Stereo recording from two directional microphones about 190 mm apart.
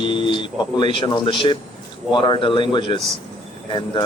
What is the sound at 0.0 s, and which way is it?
Speech, 25° left (ahead or behind).